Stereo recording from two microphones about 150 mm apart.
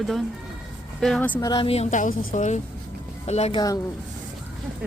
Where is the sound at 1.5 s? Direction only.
35° left (ahead or behind).